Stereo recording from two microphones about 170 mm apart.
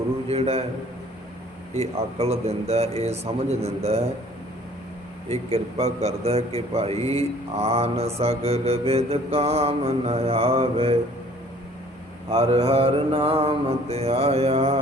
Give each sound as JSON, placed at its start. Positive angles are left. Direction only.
{"t": 0.3, "sound": "a sound", "side_deg": -35}
{"t": 1.7, "sound": "mantra", "side_deg": -35}
{"t": 5.3, "sound": "mantra", "side_deg": -35}
{"t": 12.3, "sound": "mantra", "side_deg": -35}